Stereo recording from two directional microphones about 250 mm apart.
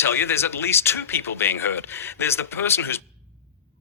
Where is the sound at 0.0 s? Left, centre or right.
Centre.